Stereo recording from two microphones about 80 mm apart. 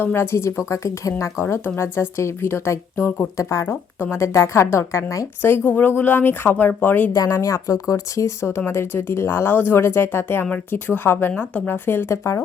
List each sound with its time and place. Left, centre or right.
0.0 s speech: left
5.4 s a woman's voice: left
7.1 s a woman's voice: left